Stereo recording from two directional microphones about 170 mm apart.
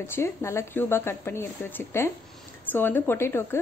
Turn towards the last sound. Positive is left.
turn(degrees=15)  # may be behind; listen again after turning